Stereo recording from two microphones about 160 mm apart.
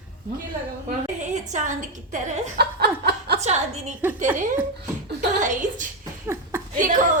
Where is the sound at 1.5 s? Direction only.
50° right (ahead or behind).